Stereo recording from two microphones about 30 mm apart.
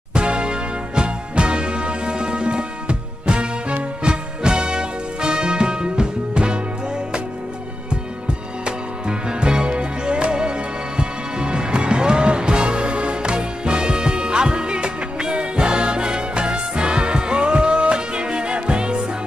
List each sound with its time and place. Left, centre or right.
0.1 s music: right
8.6 s music: right